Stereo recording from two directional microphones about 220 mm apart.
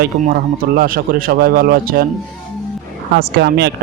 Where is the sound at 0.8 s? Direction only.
40° right (ahead or behind).